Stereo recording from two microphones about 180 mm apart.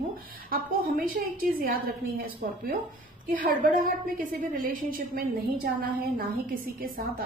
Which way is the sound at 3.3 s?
50° right (ahead or behind).